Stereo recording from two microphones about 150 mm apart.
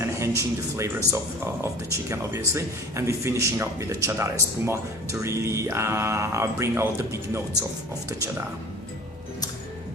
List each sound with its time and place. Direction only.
0.0 s speech: 20° right (ahead or behind)